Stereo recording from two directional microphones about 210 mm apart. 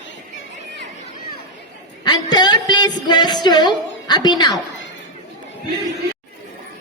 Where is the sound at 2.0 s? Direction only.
20° left (ahead or behind).